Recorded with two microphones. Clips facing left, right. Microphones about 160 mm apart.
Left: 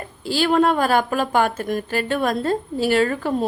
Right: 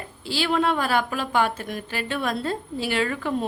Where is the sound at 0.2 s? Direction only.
45° left (ahead or behind).